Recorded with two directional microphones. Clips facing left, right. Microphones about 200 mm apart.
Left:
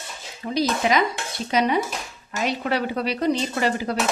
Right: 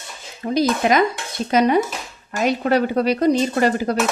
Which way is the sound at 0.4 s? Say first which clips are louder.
Right 4 dB; 50° right (ahead or behind).